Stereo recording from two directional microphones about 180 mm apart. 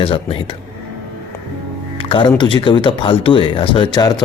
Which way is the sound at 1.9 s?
30° left (ahead or behind).